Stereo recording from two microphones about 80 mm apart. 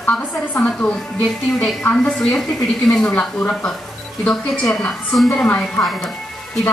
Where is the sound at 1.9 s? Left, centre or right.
Centre.